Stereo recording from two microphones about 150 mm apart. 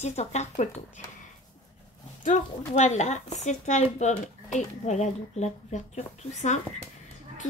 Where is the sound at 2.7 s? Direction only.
50° left (ahead or behind).